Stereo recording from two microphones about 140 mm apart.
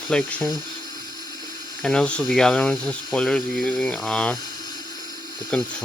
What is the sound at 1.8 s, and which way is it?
Speech, 5° left (ahead or behind).